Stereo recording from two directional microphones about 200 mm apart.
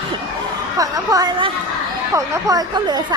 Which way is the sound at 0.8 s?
20° right (ahead or behind).